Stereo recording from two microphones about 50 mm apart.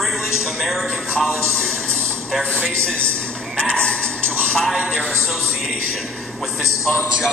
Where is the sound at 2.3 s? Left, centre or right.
Centre.